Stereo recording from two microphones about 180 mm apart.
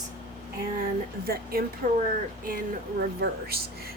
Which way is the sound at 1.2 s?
60° right (ahead or behind).